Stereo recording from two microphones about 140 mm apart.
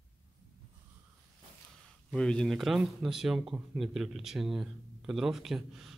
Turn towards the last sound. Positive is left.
turn(degrees=0)  # may be behind; listen again after turning